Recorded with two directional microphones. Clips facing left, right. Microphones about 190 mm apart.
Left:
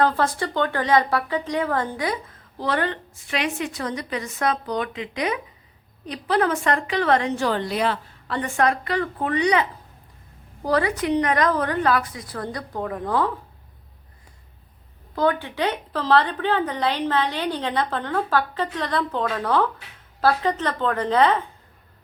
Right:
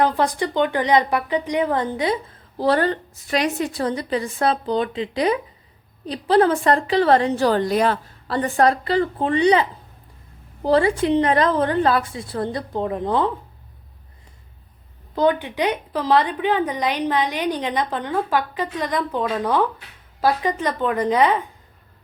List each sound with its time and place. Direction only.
0.0 s a woman's voice: 15° right (ahead or behind)
2.6 s a woman's voice: 35° right (ahead or behind)
15.1 s a woman's voice: 20° right (ahead or behind)